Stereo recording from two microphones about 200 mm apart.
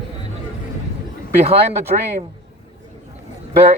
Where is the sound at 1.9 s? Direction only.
40° right (ahead or behind).